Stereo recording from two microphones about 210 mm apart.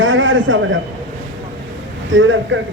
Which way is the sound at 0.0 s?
65° right (ahead or behind).